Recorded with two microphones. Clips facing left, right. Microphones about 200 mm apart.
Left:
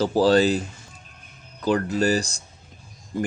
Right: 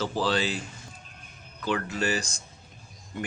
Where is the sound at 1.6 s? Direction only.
40° left (ahead or behind).